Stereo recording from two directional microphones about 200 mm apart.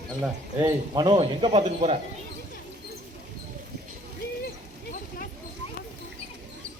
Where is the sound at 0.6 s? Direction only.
20° right (ahead or behind).